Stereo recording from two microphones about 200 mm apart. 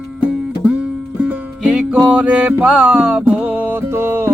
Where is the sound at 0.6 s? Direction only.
5° right (ahead or behind).